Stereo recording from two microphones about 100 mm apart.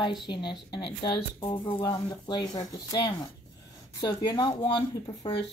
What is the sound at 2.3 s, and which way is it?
A woman's voice, 45° left (ahead or behind).